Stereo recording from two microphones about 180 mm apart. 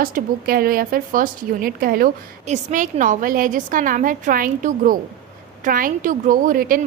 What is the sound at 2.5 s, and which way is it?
A woman's voice, 40° right (ahead or behind).